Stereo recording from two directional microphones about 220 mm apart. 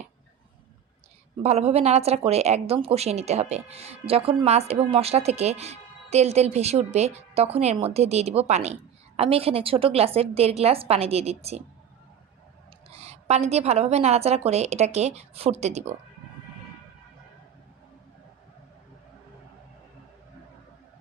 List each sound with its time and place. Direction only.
1.4 s a woman's voice: 30° right (ahead or behind)
12.9 s a woman's voice: 30° right (ahead or behind)